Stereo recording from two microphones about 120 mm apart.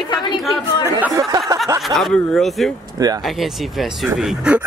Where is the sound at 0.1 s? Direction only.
40° left (ahead or behind).